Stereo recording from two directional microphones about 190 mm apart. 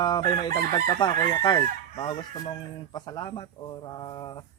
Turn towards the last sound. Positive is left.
turn(degrees=20)  # may be behind; listen again after turning